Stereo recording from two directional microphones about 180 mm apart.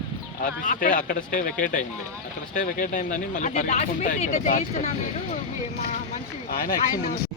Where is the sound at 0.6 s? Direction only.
50° left (ahead or behind).